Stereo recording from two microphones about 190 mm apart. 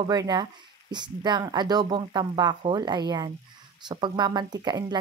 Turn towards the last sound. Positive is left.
turn(degrees=-20)  # may be behind; listen again after turning